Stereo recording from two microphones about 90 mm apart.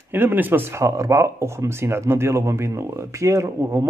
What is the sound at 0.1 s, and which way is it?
Speech, 20° right (ahead or behind).